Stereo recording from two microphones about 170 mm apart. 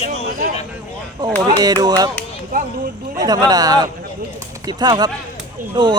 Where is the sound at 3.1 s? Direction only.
25° right (ahead or behind).